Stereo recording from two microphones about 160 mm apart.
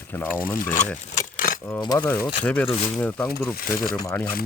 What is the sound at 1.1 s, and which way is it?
Keys jangling, 60° left (ahead or behind).